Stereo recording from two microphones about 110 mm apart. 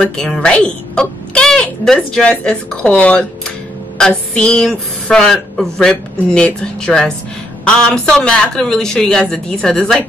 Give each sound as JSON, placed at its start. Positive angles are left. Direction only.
{"t": 0.0, "sound": "speech", "side_deg": 5}